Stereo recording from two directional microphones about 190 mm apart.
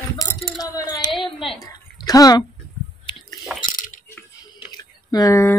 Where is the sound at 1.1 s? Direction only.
Centre (ahead or behind).